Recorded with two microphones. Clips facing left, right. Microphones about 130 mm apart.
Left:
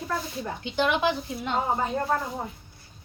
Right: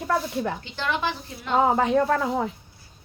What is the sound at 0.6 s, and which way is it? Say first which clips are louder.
Speech: left 3 dB; 15° left (ahead or behind).